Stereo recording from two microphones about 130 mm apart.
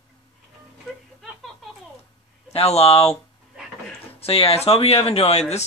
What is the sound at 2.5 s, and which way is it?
Speech, 50° left (ahead or behind).